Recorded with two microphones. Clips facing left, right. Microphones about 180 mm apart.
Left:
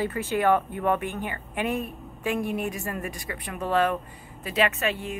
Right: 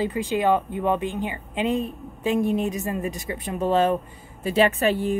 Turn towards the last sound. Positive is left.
turn(degrees=-35)  # may be behind; listen again after turning